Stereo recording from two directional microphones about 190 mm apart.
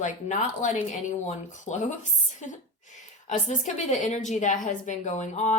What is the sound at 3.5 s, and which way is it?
A woman's voice, 40° left (ahead or behind).